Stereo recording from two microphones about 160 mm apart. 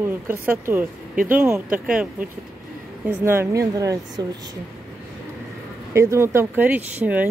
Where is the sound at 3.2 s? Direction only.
15° right (ahead or behind).